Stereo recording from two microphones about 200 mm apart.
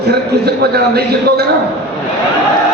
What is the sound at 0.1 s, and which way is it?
A man's voice, 55° right (ahead or behind).